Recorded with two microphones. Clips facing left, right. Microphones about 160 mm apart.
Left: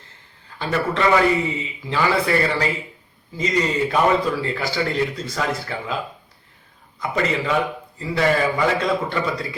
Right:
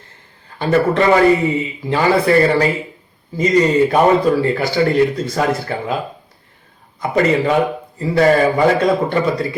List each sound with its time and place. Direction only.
0.6 s a man's voice: 40° right (ahead or behind)
7.0 s a man's voice: 40° right (ahead or behind)